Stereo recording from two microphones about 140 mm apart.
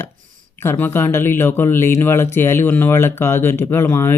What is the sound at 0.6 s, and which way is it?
Speech, 15° left (ahead or behind).